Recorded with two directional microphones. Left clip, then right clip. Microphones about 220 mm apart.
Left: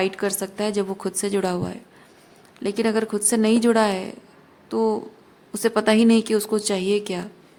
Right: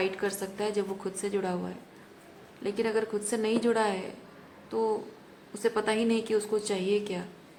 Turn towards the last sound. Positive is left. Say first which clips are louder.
# left 6 dB
turn(degrees=55)  # may be behind; listen again after turning